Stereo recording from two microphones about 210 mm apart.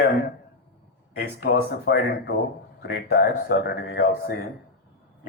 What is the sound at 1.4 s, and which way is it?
Speech, 50° left (ahead or behind).